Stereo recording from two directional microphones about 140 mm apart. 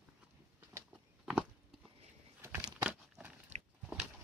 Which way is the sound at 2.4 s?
15° right (ahead or behind).